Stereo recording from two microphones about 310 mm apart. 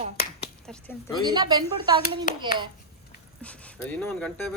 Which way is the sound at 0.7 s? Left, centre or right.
Centre.